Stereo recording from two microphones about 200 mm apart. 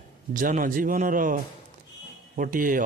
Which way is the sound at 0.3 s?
40° right (ahead or behind).